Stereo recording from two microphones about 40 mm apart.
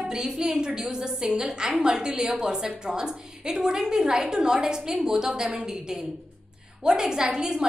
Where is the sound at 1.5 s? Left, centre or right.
Centre.